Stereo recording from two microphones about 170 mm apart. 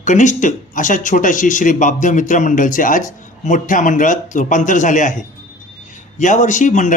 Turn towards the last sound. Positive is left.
turn(degrees=45)  # may be behind; listen again after turning